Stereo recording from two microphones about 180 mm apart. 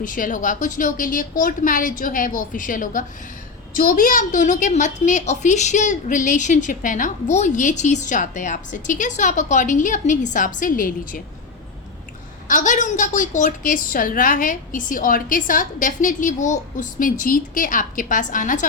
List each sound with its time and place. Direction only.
0.0 s a woman's voice: 50° left (ahead or behind)
12.5 s a woman's voice: 45° left (ahead or behind)